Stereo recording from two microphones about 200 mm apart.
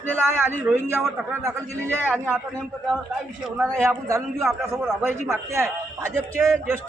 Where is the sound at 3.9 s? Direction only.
15° right (ahead or behind).